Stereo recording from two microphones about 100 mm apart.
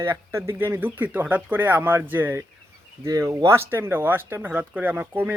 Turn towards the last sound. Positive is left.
turn(degrees=-15)  # may be behind; listen again after turning